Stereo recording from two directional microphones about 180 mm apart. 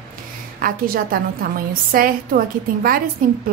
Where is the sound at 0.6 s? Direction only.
55° right (ahead or behind).